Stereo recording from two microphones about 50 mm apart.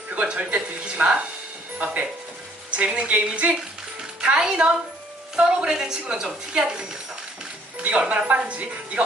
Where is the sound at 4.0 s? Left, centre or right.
Centre.